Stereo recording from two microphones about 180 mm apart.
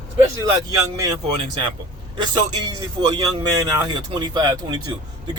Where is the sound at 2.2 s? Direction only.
25° right (ahead or behind).